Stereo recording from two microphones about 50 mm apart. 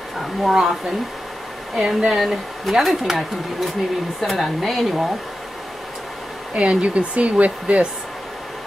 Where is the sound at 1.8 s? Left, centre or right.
Centre.